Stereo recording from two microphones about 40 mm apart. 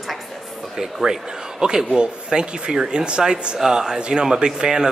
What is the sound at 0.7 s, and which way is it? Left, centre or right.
A man's voice, centre.